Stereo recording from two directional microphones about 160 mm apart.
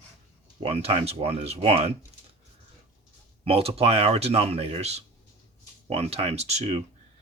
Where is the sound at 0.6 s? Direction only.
40° right (ahead or behind).